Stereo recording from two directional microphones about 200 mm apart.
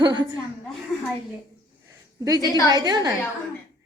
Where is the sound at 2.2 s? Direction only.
20° right (ahead or behind).